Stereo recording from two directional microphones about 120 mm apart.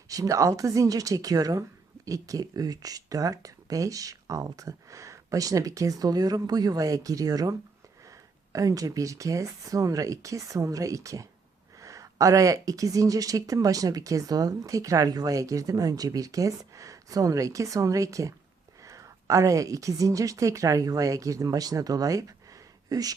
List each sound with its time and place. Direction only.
0.1 s a woman's voice: 30° right (ahead or behind)